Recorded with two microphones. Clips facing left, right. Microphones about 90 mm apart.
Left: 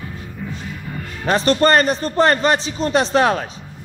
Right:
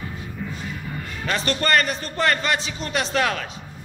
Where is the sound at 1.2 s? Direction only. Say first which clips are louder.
Left 9 dB; 30° left (ahead or behind).